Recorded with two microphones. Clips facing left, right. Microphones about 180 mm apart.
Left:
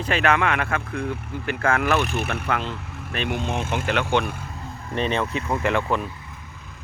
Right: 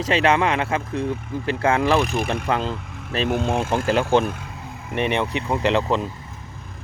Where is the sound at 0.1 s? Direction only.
25° right (ahead or behind).